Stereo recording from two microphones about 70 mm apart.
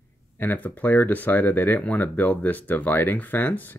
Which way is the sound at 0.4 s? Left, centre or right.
Left.